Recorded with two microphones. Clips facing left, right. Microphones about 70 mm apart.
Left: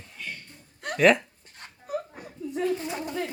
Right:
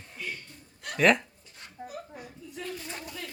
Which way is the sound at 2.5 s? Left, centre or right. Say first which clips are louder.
Left 12 dB; left.